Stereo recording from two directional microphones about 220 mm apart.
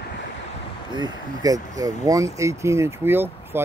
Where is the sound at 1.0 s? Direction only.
15° right (ahead or behind).